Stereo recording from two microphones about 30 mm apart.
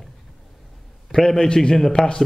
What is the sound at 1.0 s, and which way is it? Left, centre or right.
Speech, centre.